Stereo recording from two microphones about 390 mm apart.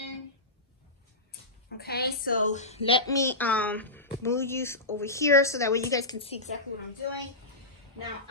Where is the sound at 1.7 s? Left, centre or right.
Left.